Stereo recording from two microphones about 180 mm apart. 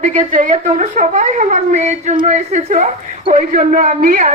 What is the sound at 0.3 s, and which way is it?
A man's voice, 45° right (ahead or behind).